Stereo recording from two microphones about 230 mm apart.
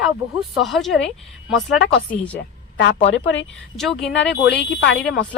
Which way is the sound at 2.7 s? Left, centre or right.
Left.